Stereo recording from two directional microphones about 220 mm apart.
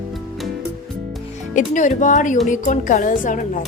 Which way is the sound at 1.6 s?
35° left (ahead or behind).